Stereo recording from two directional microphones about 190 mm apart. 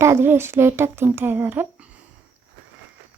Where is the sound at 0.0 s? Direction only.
15° right (ahead or behind).